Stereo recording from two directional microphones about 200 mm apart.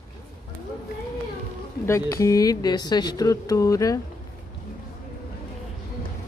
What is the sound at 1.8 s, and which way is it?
Speech, 15° left (ahead or behind).